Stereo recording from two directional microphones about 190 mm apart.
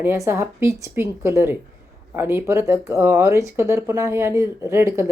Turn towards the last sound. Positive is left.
turn(degrees=-15)  # may be behind; listen again after turning